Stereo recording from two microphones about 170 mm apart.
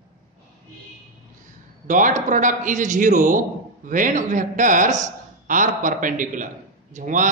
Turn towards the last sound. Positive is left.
turn(degrees=-45)  # may be behind; listen again after turning